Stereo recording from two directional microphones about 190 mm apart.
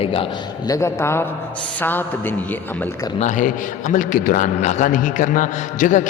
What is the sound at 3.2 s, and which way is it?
A man's voice, 40° left (ahead or behind).